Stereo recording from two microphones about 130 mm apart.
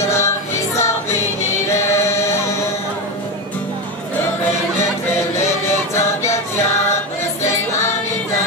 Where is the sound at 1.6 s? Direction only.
20° left (ahead or behind).